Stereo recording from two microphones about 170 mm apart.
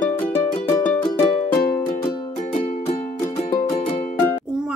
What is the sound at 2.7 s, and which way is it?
Music, 45° left (ahead or behind).